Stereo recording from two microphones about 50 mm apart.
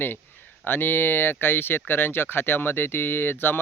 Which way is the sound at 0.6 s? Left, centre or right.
Left.